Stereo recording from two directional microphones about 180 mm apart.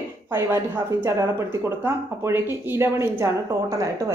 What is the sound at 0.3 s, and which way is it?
A woman's voice, 15° right (ahead or behind).